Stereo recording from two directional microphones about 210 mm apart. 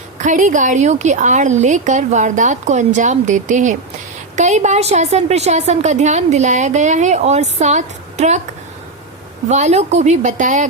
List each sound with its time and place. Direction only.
0.2 s a woman's voice: 35° right (ahead or behind)
9.5 s a woman's voice: 35° right (ahead or behind)